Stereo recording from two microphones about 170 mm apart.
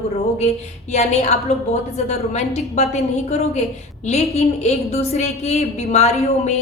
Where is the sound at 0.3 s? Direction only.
40° left (ahead or behind).